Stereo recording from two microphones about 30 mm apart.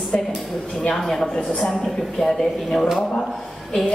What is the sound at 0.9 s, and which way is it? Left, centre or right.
Speech, centre.